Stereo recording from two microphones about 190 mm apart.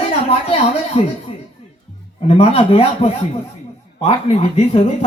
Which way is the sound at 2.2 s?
30° left (ahead or behind).